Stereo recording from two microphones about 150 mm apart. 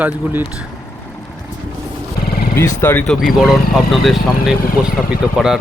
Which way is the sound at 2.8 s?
15° left (ahead or behind).